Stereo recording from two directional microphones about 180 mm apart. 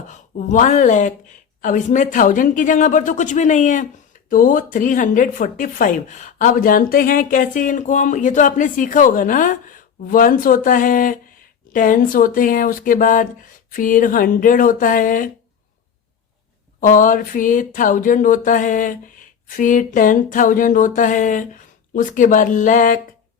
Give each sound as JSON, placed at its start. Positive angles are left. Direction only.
{"t": 0.1, "sound": "speech", "side_deg": 45}
{"t": 16.8, "sound": "speech", "side_deg": 45}